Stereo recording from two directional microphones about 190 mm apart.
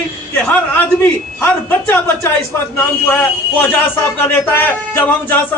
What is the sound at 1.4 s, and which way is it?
A man's voice, 10° left (ahead or behind).